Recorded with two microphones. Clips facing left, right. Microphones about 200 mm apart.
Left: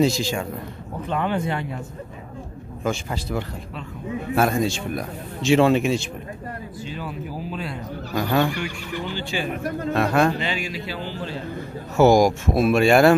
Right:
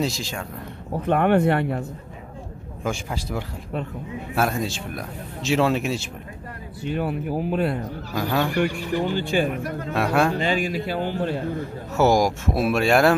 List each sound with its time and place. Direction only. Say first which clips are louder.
0.0 s a man's voice: left 6 dB; centre (ahead or behind)
1.0 s speech: right 6 dB; 60° right (ahead or behind)
3.1 s a man's voice: left 2 dB; 10° right (ahead or behind)
6.8 s speech: right 9 dB; 60° right (ahead or behind)
8.1 s a man's voice: left 3 dB; 5° right (ahead or behind)
8.5 s speech: right 7 dB; 45° right (ahead or behind)
9.9 s speech: left 1 dB; 5° right (ahead or behind)
10.4 s speech: right 5 dB; 50° right (ahead or behind)
12.0 s a man's voice: left 4 dB; centre (ahead or behind)